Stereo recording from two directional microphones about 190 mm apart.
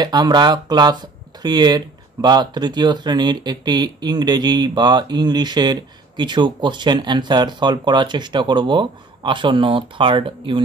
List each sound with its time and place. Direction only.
0.0 s speech: 20° right (ahead or behind)